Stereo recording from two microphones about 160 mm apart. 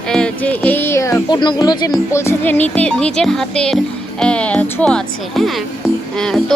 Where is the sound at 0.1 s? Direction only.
5° left (ahead or behind); by 1.9 s 25° left (ahead or behind).